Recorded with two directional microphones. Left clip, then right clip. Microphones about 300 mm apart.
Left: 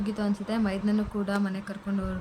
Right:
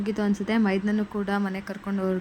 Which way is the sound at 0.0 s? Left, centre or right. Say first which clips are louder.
Right 4 dB; centre.